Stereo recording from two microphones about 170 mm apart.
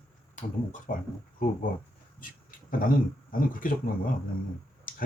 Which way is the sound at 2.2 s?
55° left (ahead or behind).